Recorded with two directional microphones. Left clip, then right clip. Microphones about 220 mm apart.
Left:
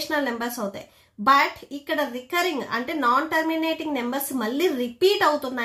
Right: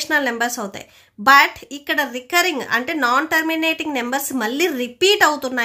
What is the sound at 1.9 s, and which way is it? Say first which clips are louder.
A woman's voice: right 6 dB; 35° right (ahead or behind).